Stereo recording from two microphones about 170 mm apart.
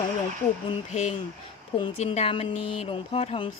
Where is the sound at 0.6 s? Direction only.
35° left (ahead or behind).